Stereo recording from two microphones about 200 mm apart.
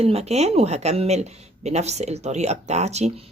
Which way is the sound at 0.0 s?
30° right (ahead or behind).